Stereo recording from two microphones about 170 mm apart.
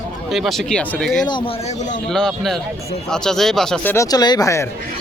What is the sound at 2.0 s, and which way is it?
Speech, 5° left (ahead or behind).